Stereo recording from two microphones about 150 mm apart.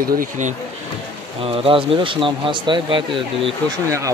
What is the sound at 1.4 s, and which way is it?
Speech, 40° right (ahead or behind).